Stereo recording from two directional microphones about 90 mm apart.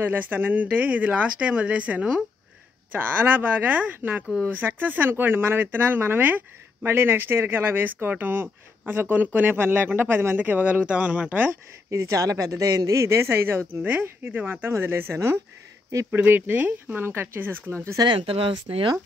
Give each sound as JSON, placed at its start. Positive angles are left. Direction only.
{"t": 0.0, "sound": "speech", "side_deg": -20}
{"t": 11.9, "sound": "speech", "side_deg": -35}
{"t": 18.0, "sound": "speech", "side_deg": -85}